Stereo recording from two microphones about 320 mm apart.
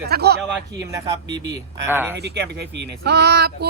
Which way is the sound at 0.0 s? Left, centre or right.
Right.